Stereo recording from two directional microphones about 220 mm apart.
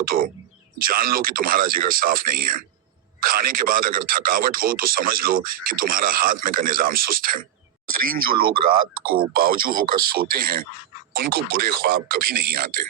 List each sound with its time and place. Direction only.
0.0 s speech: 40° right (ahead or behind)